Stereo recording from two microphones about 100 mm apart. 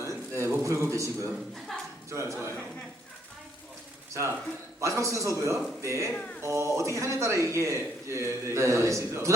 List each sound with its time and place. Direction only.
0.0 s a sound: 30° right (ahead or behind)
2.0 s a man's voice: 30° right (ahead or behind)
4.1 s a man's voice: 25° right (ahead or behind)